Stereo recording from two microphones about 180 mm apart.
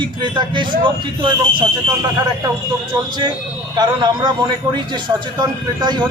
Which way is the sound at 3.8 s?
25° right (ahead or behind).